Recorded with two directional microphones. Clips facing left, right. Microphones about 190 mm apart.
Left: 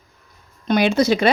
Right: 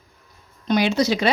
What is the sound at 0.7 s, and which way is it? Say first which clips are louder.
Speech: left 3 dB; 55° left (ahead or behind).